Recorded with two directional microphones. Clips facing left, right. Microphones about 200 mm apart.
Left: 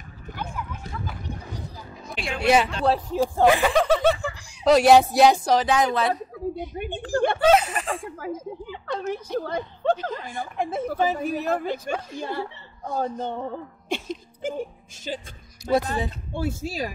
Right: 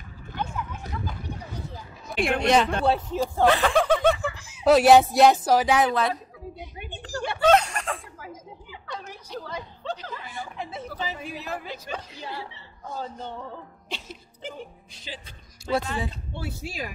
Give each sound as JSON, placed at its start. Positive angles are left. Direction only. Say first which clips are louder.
{"t": 2.1, "sound": "speech", "louder": "right 7 dB", "side_deg": -55}
{"t": 2.4, "sound": "a woman's voice", "louder": "left 3 dB", "side_deg": 5}
{"t": 6.5, "sound": "a woman's voice", "louder": "left 9 dB", "side_deg": 50}
{"t": 7.4, "sound": "a woman's voice", "louder": "right 2 dB", "side_deg": 5}
{"t": 8.2, "sound": "a woman's voice", "louder": "left 10 dB", "side_deg": 55}